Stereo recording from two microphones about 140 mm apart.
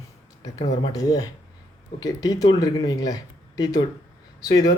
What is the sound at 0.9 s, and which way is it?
Speech, 25° left (ahead or behind).